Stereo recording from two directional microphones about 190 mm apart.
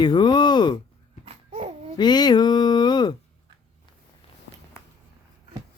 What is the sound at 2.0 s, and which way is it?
Speech, 20° left (ahead or behind).